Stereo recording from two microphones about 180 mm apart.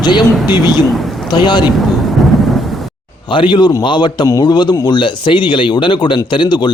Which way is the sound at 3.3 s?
25° left (ahead or behind).